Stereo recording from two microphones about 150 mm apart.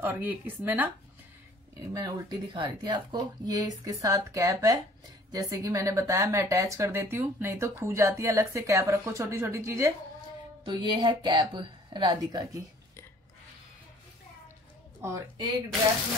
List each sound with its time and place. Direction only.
0.0 s speech: 10° right (ahead or behind)
2.0 s speech: 30° right (ahead or behind)
10.6 s speech: 35° right (ahead or behind)
15.0 s a woman's voice: 20° right (ahead or behind)